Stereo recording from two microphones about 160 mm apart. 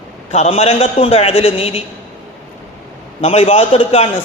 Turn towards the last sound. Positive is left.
turn(degrees=40)  # may be behind; listen again after turning